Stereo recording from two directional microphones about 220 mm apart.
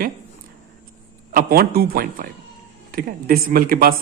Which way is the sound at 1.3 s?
45° right (ahead or behind).